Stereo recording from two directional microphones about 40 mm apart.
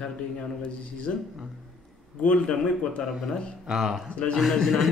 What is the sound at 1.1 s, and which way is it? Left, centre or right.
Speech, left.